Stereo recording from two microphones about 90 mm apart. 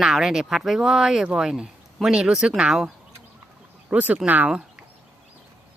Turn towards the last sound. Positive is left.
turn(degrees=-10)  # may be behind; listen again after turning